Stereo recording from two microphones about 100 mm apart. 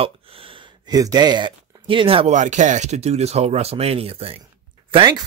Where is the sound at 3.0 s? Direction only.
90° right.